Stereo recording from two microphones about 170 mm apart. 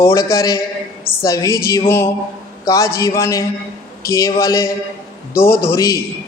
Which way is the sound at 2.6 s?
20° left (ahead or behind).